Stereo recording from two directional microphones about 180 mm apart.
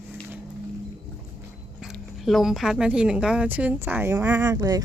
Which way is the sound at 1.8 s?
Centre (ahead or behind).